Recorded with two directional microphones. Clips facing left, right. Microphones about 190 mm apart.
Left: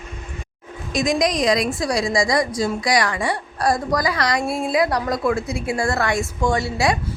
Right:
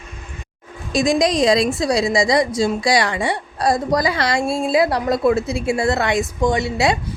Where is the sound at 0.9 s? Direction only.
30° right (ahead or behind).